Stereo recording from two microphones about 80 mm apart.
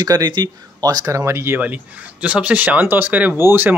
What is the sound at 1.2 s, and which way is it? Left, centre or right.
Speech, right.